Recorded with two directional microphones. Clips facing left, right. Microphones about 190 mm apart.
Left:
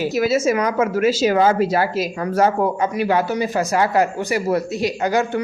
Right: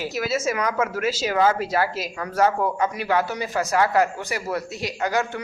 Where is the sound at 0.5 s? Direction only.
20° left (ahead or behind).